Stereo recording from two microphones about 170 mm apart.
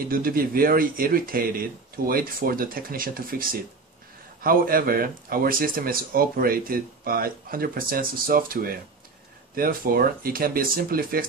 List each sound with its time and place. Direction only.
0.1 s speech: 60° right (ahead or behind)